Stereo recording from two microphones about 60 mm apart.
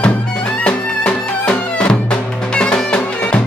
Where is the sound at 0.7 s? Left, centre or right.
Centre.